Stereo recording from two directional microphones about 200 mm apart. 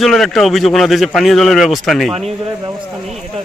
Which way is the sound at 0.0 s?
Centre (ahead or behind).